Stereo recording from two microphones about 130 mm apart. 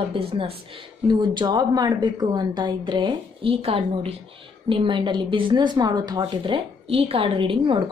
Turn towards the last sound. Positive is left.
turn(degrees=-40)  # may be behind; listen again after turning